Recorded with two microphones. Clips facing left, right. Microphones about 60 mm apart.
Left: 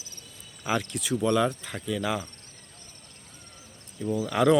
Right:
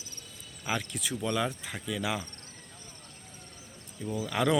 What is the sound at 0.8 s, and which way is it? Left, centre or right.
Speech, centre.